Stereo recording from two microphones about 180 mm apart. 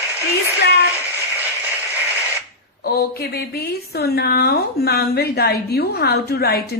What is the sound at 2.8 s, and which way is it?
A woman's voice, 60° left (ahead or behind).